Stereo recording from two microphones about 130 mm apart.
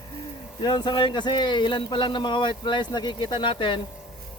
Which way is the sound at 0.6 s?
35° left (ahead or behind).